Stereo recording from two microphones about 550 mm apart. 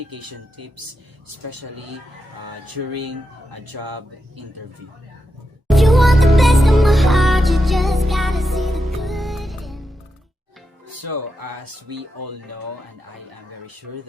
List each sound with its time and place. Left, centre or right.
0.1 s speech: right
5.6 s music: centre
10.8 s speech: right